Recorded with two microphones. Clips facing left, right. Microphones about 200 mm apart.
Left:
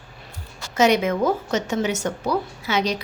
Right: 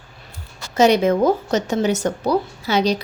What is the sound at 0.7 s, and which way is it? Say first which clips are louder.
A woman's voice: right 4 dB; 35° right (ahead or behind).